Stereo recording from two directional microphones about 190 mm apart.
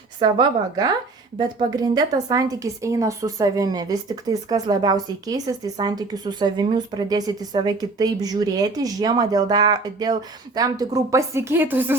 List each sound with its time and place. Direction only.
0.2 s a woman's voice: 25° right (ahead or behind)